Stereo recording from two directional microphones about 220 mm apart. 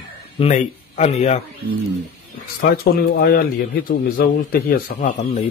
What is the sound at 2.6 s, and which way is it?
A man's voice, 45° left (ahead or behind).